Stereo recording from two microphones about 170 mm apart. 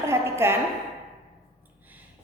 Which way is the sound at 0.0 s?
15° right (ahead or behind).